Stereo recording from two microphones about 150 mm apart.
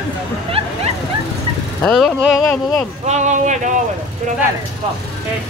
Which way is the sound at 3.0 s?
50° right (ahead or behind).